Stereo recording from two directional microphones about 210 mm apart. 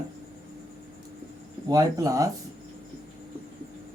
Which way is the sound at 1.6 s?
15° right (ahead or behind).